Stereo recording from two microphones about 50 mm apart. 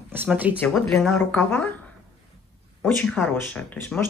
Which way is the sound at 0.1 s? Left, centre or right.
Right.